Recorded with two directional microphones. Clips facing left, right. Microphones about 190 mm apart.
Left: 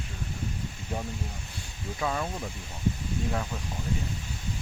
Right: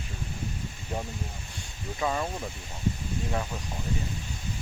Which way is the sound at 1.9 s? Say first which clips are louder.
Right 1 dB; 5° right (ahead or behind).